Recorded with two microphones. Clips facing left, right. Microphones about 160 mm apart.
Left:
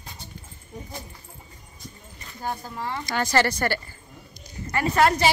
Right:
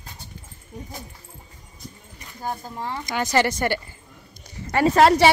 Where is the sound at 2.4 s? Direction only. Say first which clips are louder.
Right 1 dB; 15° right (ahead or behind).